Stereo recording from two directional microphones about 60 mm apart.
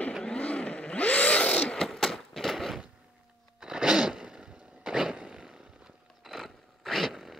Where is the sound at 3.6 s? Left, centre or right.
Centre.